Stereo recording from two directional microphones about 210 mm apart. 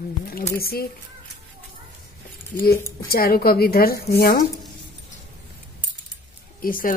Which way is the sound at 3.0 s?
45° left (ahead or behind).